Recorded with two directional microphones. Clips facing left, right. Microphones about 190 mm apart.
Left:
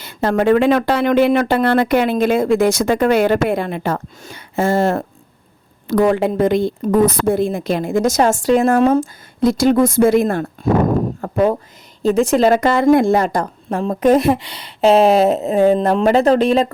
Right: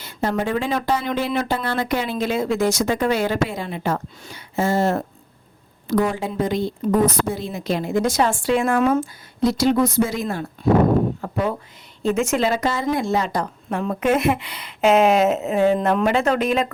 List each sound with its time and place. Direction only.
0.0 s a woman's voice: 75° left (ahead or behind); by 9.0 s 40° left (ahead or behind)
9.4 s a woman's voice: 50° left (ahead or behind)
12.0 s a woman's voice: 35° left (ahead or behind)
12.5 s a woman's voice: 55° left (ahead or behind); by 16.7 s 30° left (ahead or behind)